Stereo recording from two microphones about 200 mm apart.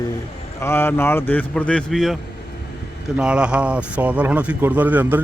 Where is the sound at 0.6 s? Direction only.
10° left (ahead or behind).